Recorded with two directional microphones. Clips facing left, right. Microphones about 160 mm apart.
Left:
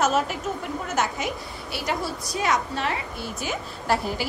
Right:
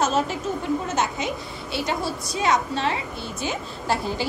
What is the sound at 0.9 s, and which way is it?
A woman's voice, 25° right (ahead or behind).